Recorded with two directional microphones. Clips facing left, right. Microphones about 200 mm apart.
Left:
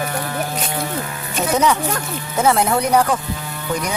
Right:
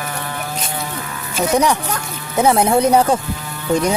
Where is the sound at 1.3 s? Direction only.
15° right (ahead or behind).